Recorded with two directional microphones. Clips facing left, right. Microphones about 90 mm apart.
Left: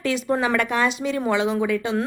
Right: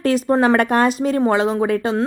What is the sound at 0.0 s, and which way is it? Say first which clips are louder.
Speech: right 6 dB; 40° right (ahead or behind).